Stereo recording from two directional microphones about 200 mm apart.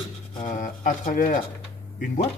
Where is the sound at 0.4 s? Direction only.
40° left (ahead or behind).